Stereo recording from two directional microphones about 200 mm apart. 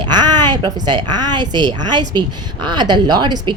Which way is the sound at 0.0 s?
20° right (ahead or behind).